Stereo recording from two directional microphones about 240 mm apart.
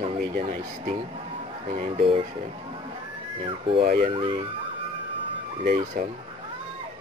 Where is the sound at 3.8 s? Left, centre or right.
Right.